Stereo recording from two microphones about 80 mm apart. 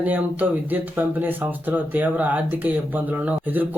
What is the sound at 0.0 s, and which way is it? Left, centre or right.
Speech, right.